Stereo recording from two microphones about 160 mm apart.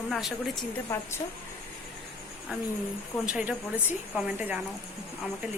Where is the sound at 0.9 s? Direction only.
15° left (ahead or behind).